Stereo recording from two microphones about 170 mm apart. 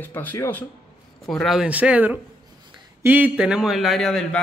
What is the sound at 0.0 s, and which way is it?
A man's voice, 10° left (ahead or behind).